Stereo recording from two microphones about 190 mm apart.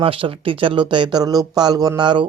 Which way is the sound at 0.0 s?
25° right (ahead or behind).